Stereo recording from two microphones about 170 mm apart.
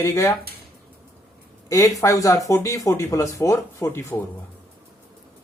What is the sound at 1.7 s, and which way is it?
Speech, 15° left (ahead or behind).